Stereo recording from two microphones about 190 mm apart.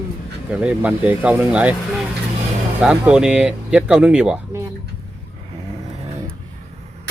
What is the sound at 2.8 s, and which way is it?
Speech, 5° right (ahead or behind).